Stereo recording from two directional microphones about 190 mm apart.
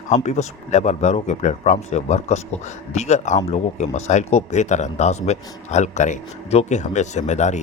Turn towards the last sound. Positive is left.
turn(degrees=40)  # may be behind; listen again after turning